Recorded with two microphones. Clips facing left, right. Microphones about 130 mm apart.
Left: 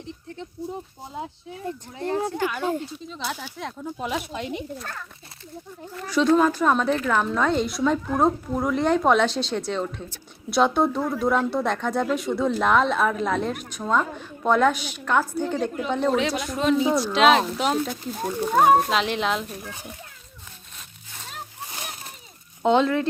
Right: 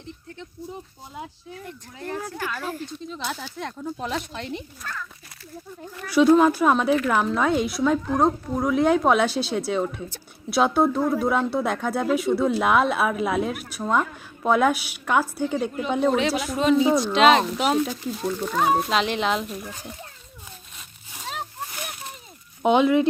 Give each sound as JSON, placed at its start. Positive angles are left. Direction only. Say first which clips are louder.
{"t": 1.1, "sound": "speech", "louder": "left 3 dB", "side_deg": 25}
{"t": 3.1, "sound": "speech", "louder": "even", "side_deg": 5}
{"t": 4.8, "sound": "speech", "louder": "right 1 dB", "side_deg": 30}
{"t": 6.1, "sound": "speech", "louder": "right 3 dB", "side_deg": -10}
{"t": 18.5, "sound": "speech", "louder": "left 5 dB", "side_deg": 45}
{"t": 18.9, "sound": "speech", "louder": "right 1 dB", "side_deg": 0}
{"t": 22.6, "sound": "speech", "louder": "right 2 dB", "side_deg": -15}